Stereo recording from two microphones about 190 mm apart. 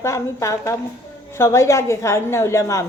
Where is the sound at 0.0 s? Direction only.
15° left (ahead or behind).